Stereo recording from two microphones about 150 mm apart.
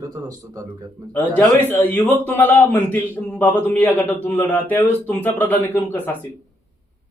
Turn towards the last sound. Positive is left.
turn(degrees=15)  # may be behind; listen again after turning